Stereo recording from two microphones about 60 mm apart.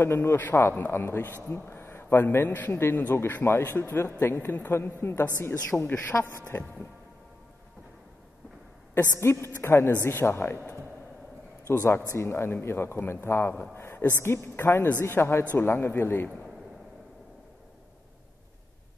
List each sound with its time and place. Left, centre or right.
0.0 s a man's voice: left
9.1 s a man's voice: left
10.4 s speech: left
11.7 s a man's voice: left